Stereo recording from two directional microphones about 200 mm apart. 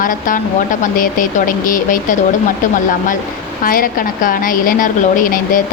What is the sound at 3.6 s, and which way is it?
Speech, 45° left (ahead or behind).